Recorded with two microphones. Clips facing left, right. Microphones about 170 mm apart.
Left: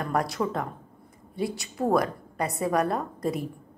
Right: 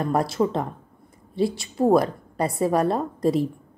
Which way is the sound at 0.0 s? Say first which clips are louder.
Right 5 dB; 30° right (ahead or behind).